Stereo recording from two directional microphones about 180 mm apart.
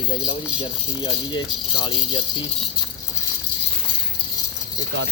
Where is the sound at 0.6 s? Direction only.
30° left (ahead or behind).